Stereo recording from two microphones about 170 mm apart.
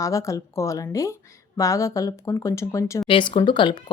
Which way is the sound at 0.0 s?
20° left (ahead or behind).